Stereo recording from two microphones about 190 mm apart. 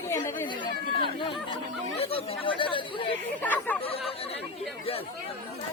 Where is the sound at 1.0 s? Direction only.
25° left (ahead or behind).